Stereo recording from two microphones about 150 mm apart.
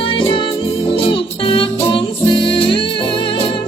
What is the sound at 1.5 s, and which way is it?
Music, 35° left (ahead or behind).